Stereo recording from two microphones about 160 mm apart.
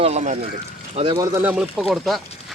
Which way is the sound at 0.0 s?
45° right (ahead or behind).